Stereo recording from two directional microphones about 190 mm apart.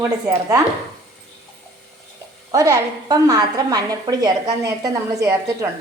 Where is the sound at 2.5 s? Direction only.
15° right (ahead or behind).